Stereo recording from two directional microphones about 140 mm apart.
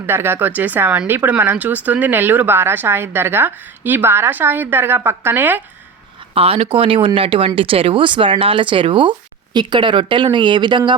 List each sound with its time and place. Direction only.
0.0 s speech: 15° right (ahead or behind)
6.3 s speech: 45° right (ahead or behind)